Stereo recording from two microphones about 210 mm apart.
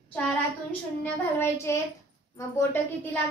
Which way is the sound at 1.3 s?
10° left (ahead or behind).